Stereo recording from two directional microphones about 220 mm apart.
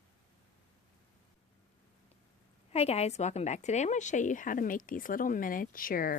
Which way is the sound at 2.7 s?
30° left (ahead or behind).